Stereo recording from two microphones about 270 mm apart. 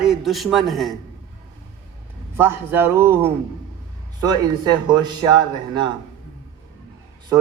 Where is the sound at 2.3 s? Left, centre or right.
Centre.